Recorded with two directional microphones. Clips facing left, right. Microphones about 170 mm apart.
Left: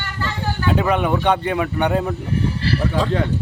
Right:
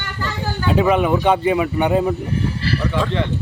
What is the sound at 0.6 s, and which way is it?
Speech, 5° right (ahead or behind).